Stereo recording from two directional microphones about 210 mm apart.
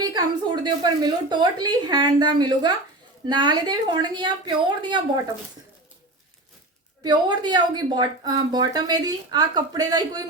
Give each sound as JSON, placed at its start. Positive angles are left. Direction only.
{"t": 0.0, "sound": "a woman's voice", "side_deg": -20}
{"t": 7.0, "sound": "a woman's voice", "side_deg": -20}